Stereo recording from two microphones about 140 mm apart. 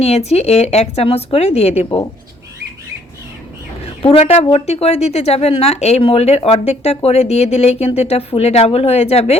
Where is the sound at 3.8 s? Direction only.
45° left (ahead or behind).